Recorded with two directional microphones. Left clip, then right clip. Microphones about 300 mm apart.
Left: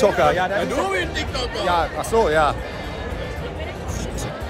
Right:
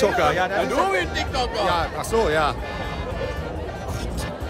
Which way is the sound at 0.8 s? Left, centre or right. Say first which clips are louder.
Even; right.